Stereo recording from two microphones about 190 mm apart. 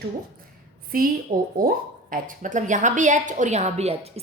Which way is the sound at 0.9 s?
50° right (ahead or behind).